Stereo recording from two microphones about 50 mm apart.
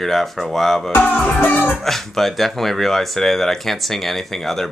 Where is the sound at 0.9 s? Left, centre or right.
Left.